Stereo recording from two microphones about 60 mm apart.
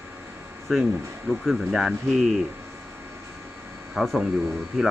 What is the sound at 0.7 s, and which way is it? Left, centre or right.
Speech, centre.